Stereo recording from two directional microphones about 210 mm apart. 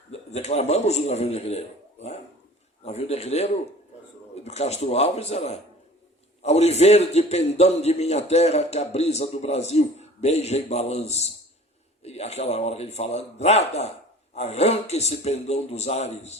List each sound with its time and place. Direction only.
0.1 s a man's voice: 30° left (ahead or behind)